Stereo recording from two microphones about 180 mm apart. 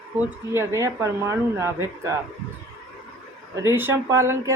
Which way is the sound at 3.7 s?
15° right (ahead or behind).